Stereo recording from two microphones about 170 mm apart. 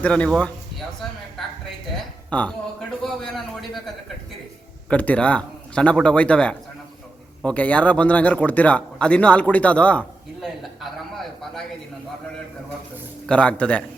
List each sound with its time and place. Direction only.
0.0 s a man's voice: 5° left (ahead or behind)
2.3 s a man's voice: 10° left (ahead or behind)
13.2 s a man's voice: 5° left (ahead or behind)